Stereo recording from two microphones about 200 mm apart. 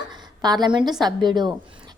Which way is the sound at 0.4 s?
20° right (ahead or behind).